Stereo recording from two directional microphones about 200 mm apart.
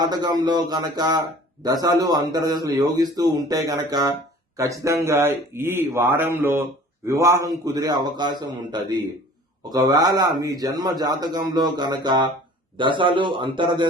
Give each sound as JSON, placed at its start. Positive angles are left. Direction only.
{"t": 0.0, "sound": "a man's voice", "side_deg": -20}